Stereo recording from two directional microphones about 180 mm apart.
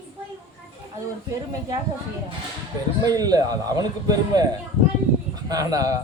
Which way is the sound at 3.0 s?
20° right (ahead or behind).